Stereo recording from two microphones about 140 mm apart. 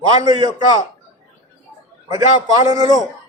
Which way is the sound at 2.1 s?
30° right (ahead or behind).